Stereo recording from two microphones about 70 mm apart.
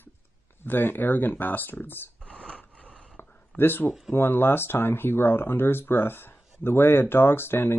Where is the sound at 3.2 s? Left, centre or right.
Left.